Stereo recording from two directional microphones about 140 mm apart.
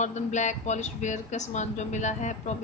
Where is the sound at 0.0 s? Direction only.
60° left (ahead or behind).